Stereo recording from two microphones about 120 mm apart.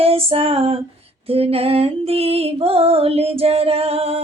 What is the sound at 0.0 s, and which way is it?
Female singing, 55° right (ahead or behind).